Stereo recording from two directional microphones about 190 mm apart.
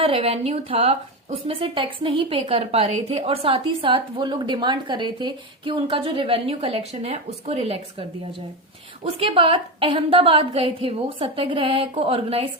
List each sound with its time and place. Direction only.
0.0 s a woman's voice: 30° right (ahead or behind)
9.1 s a woman's voice: 30° right (ahead or behind)